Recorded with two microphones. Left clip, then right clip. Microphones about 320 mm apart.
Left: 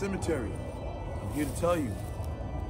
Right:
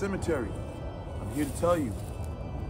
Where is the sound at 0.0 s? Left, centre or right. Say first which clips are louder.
Right 2 dB; centre.